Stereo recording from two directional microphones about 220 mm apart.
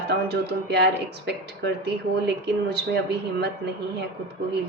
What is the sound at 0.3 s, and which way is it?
A woman's voice, 50° right (ahead or behind).